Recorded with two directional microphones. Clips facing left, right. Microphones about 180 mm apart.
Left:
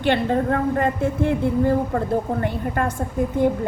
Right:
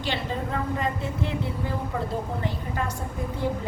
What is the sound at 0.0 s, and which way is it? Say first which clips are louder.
A woman's voice: left 10 dB; 55° left (ahead or behind).